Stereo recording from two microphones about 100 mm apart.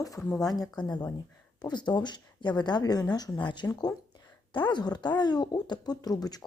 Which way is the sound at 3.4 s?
50° left (ahead or behind).